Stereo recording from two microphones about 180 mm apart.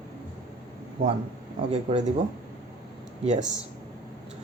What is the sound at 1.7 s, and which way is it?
Speech, 40° right (ahead or behind).